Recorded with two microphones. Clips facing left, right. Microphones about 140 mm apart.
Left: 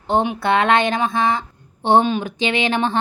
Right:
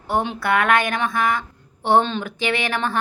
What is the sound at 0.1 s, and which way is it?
Speech, 20° left (ahead or behind).